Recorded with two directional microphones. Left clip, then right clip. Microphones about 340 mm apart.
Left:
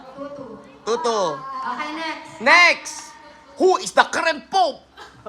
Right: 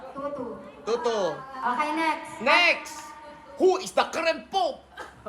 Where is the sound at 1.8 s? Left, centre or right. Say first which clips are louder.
Right 2 dB; centre.